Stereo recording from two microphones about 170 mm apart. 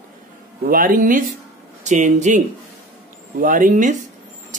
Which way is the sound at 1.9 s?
45° right (ahead or behind).